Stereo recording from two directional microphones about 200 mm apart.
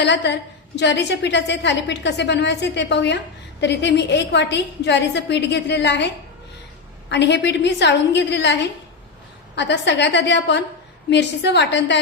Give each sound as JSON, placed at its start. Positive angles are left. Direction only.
{"t": 0.0, "sound": "a woman's voice", "side_deg": 60}
{"t": 7.1, "sound": "a woman's voice", "side_deg": 60}